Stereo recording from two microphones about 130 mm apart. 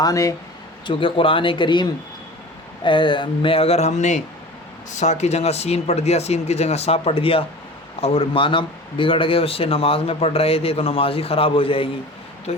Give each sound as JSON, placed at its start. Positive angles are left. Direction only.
{"t": 0.0, "sound": "speech", "side_deg": 25}
{"t": 0.9, "sound": "speech", "side_deg": 40}